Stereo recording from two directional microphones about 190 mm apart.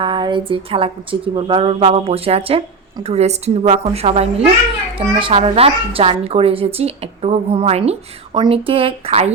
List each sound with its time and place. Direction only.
0.0 s speech: 25° right (ahead or behind)